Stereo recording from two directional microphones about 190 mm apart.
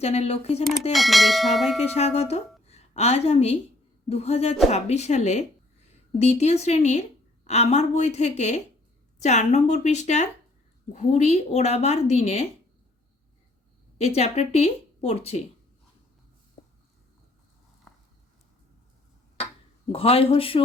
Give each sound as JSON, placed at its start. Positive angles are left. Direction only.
{"t": 0.0, "sound": "speech", "side_deg": 35}
{"t": 0.9, "sound": "bell", "side_deg": 0}
{"t": 1.9, "sound": "a woman's voice", "side_deg": 35}
{"t": 14.2, "sound": "speech", "side_deg": 35}
{"t": 19.9, "sound": "speech", "side_deg": 30}